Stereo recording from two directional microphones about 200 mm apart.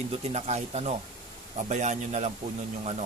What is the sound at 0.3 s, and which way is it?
A man's voice, 35° right (ahead or behind).